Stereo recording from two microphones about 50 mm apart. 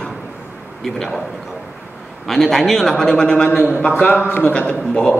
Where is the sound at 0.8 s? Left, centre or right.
Centre.